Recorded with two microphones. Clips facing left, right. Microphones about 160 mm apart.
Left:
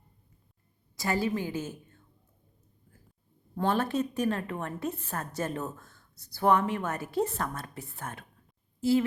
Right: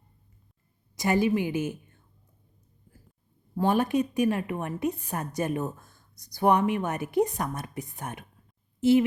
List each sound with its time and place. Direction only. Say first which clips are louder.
0.9 s a woman's voice: right 5 dB; 20° right (ahead or behind)
3.5 s a woman's voice: right 4 dB; 10° right (ahead or behind)